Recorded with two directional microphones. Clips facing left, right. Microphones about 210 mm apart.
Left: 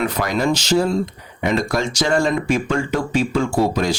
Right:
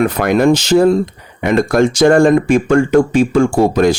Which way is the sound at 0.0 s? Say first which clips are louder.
Right 8 dB; 55° right (ahead or behind).